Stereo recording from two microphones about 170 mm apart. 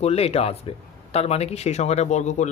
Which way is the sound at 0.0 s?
35° left (ahead or behind).